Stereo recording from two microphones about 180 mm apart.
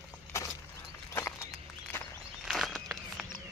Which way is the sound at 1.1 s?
15° left (ahead or behind).